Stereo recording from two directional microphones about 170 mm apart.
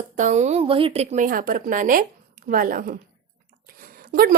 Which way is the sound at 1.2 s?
55° right (ahead or behind).